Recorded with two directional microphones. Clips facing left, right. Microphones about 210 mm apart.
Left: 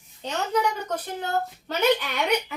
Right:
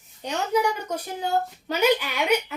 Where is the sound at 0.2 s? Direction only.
10° right (ahead or behind).